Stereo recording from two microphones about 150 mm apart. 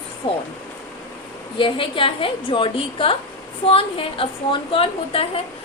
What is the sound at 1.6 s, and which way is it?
A woman's voice, 35° left (ahead or behind).